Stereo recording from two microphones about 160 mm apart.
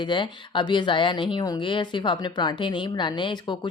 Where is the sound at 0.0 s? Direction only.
30° left (ahead or behind).